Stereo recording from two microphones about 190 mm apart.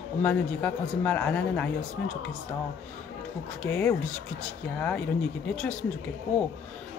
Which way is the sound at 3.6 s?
10° left (ahead or behind).